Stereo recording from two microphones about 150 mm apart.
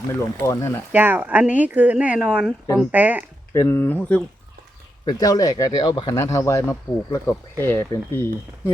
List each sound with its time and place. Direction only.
0.1 s speech: 20° left (ahead or behind)
0.9 s speech: 10° right (ahead or behind)
3.5 s speech: 20° left (ahead or behind)
5.0 s speech: 25° left (ahead or behind)
6.1 s speech: 20° left (ahead or behind)